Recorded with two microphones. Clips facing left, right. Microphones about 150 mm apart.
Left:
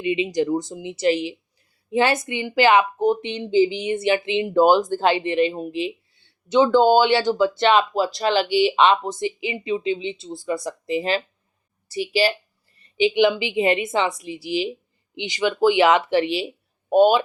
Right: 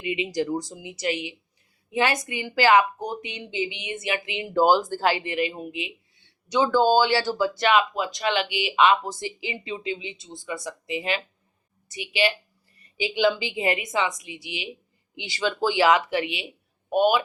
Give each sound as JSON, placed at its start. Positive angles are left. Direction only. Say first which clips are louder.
{"t": 0.0, "sound": "a woman's voice", "louder": "left 5 dB", "side_deg": 25}
{"t": 15.1, "sound": "a woman's voice", "louder": "left 4 dB", "side_deg": 20}